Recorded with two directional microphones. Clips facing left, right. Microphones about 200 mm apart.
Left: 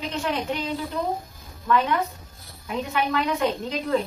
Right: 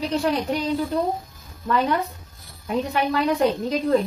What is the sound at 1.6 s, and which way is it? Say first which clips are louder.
A woman's voice: right 1 dB; 35° right (ahead or behind).